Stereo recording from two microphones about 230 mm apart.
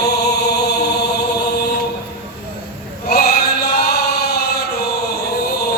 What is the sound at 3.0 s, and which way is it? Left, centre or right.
Chant, left.